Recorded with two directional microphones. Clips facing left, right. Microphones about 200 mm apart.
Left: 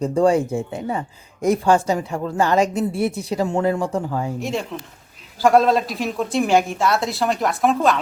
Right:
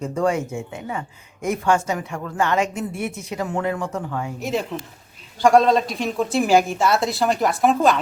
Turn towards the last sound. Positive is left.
turn(degrees=0)  # may be behind; listen again after turning